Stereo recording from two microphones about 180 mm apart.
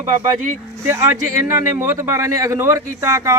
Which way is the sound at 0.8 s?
15° right (ahead or behind).